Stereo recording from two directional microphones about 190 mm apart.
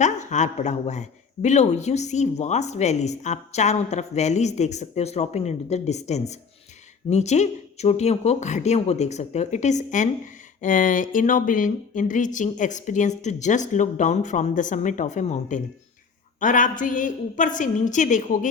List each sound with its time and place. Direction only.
0.0 s a woman's voice: 40° left (ahead or behind)